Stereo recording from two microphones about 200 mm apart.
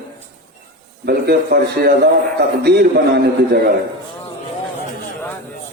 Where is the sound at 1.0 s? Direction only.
50° right (ahead or behind).